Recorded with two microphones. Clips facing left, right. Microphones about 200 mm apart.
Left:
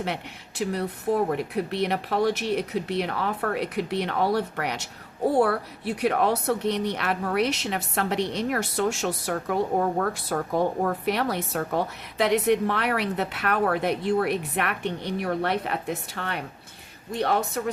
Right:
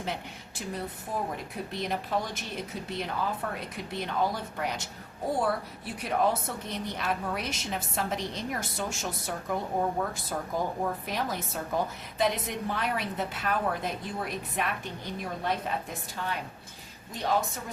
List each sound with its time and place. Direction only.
0.0 s a woman's voice: 70° left (ahead or behind)